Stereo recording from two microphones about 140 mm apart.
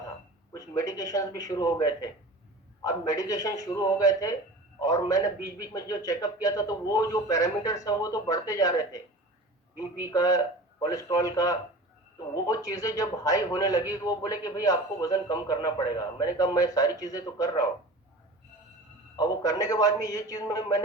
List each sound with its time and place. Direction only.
0.5 s a man's voice: 20° left (ahead or behind)
19.1 s a man's voice: 30° left (ahead or behind)